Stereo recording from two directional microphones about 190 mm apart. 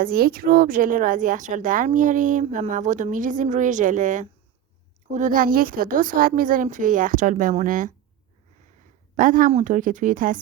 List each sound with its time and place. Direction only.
0.0 s a woman's voice: 50° right (ahead or behind)
9.1 s a woman's voice: 45° right (ahead or behind)